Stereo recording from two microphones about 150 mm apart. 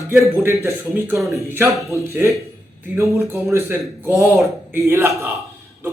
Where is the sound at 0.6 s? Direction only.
15° right (ahead or behind).